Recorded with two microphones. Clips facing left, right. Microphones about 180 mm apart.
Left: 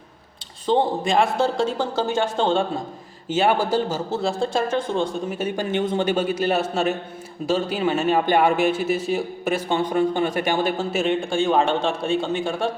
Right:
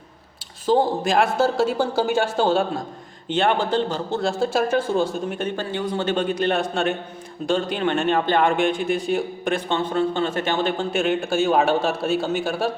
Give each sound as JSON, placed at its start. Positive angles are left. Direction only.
{"t": 0.7, "sound": "a man's voice", "side_deg": 0}
{"t": 3.2, "sound": "a man's voice", "side_deg": 5}
{"t": 5.4, "sound": "a man's voice", "side_deg": 10}
{"t": 6.1, "sound": "a man's voice", "side_deg": 5}